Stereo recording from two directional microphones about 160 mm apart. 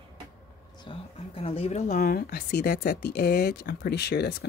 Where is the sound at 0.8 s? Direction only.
35° left (ahead or behind).